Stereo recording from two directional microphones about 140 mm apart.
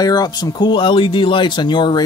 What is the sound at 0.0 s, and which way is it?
Speech, 30° left (ahead or behind).